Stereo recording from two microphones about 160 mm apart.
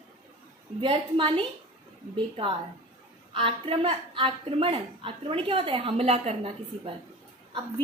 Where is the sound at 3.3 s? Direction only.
35° right (ahead or behind).